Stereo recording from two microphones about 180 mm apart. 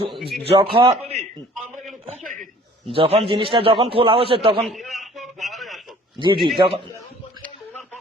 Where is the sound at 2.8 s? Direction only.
30° right (ahead or behind).